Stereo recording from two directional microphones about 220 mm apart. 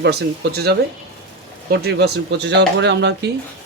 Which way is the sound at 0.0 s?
45° right (ahead or behind).